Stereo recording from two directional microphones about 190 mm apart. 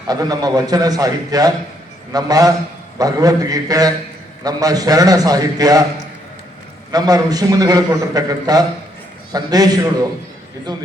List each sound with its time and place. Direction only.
0.1 s a man's voice: 20° right (ahead or behind)
6.9 s a man's voice: 20° right (ahead or behind)